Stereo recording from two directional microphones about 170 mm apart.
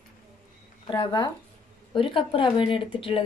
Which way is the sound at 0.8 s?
30° left (ahead or behind).